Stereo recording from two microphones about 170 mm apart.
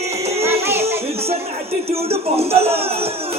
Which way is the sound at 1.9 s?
35° right (ahead or behind).